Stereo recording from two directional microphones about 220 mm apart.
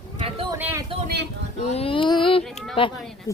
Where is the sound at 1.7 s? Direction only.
25° left (ahead or behind).